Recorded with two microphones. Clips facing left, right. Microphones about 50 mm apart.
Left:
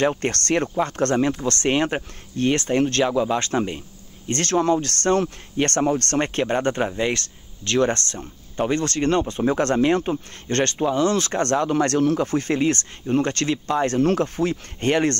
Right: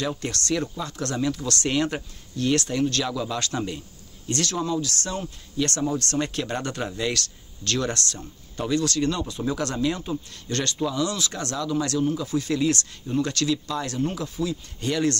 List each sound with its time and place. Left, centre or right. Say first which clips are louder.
0.0 s speech: left 7 dB; left
4.3 s speech: left 6 dB; left